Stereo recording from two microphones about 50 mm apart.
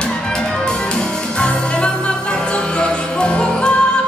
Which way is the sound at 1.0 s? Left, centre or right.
Centre.